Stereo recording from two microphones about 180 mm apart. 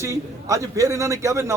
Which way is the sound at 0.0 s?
15° right (ahead or behind).